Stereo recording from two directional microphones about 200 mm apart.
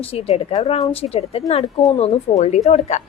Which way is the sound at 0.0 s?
30° left (ahead or behind).